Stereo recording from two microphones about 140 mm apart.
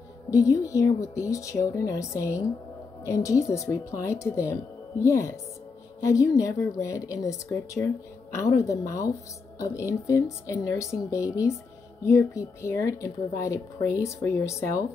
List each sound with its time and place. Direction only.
0.3 s a woman's voice: 25° left (ahead or behind)